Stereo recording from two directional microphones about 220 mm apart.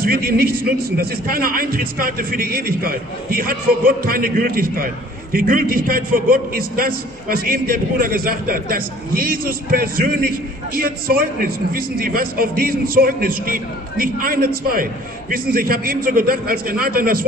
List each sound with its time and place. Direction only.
0.0 s a man's voice: 45° right (ahead or behind)